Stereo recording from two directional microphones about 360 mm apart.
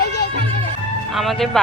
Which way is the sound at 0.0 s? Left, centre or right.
Left.